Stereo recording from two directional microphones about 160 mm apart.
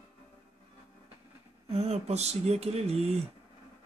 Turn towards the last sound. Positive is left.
turn(degrees=-40)  # may be behind; listen again after turning